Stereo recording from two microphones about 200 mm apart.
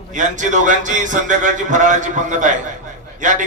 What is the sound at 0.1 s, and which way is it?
A man's voice, 40° right (ahead or behind).